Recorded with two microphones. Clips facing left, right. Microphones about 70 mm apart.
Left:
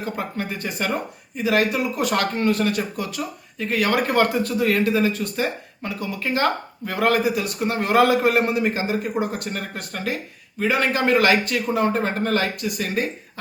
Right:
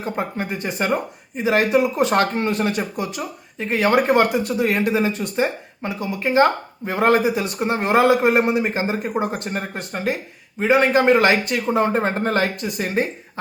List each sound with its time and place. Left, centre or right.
0.0 s speech: right